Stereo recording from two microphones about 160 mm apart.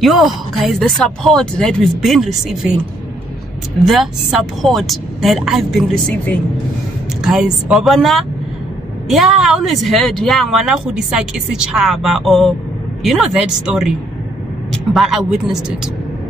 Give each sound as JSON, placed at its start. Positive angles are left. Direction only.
{"t": 0.0, "sound": "a woman's voice", "side_deg": 0}
{"t": 3.8, "sound": "a woman's voice", "side_deg": 0}
{"t": 7.2, "sound": "a woman's voice", "side_deg": -5}